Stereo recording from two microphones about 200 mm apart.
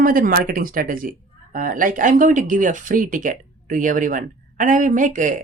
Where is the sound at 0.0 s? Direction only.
45° right (ahead or behind).